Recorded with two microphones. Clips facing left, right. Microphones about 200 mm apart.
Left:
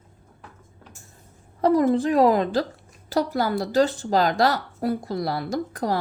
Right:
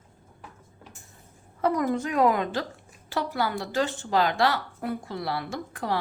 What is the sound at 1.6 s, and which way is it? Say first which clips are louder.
A woman's voice: left 6 dB; 35° left (ahead or behind).